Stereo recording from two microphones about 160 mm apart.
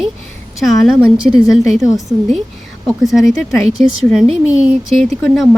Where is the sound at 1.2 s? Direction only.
35° right (ahead or behind).